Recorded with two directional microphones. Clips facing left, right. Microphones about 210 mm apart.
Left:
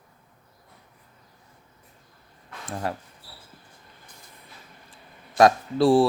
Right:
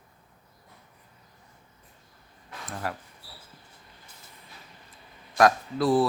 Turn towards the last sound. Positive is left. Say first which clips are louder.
# left 5 dB
turn(degrees=30)  # may be behind; listen again after turning